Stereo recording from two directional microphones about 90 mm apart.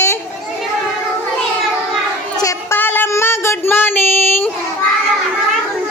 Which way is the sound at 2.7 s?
20° left (ahead or behind).